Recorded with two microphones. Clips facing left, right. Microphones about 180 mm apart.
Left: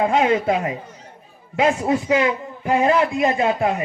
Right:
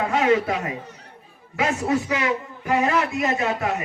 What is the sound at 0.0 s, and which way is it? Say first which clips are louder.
A man's voice: left 2 dB; 25° left (ahead or behind).